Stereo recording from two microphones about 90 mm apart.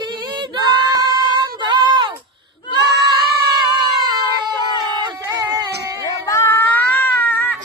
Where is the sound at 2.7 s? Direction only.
55° right (ahead or behind).